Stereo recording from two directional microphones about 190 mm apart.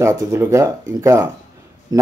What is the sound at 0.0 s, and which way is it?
A man's voice, 15° right (ahead or behind).